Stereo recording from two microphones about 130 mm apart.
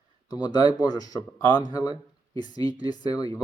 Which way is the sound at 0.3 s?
30° left (ahead or behind).